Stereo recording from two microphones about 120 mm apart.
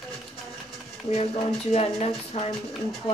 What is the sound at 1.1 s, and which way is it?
Speech, 60° left (ahead or behind).